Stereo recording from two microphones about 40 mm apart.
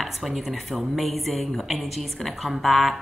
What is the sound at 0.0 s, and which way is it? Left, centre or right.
A woman's voice, centre.